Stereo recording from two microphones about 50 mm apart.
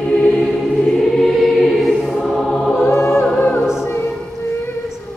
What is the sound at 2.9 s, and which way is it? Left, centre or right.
Choir, left.